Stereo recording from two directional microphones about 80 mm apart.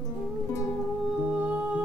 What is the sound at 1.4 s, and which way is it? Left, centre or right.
Music, centre.